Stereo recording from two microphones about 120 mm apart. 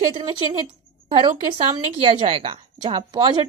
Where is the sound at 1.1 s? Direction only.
40° right (ahead or behind).